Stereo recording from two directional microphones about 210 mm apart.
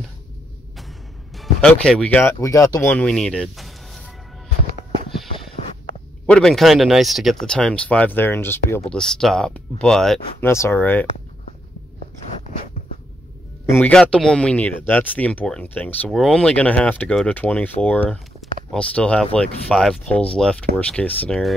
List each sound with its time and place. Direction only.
1.3 s speech: centre (ahead or behind)
6.2 s speech: 5° left (ahead or behind)
13.7 s speech: 10° left (ahead or behind)